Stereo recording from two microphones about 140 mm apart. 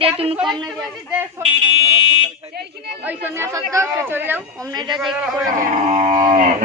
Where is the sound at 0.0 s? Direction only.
45° right (ahead or behind).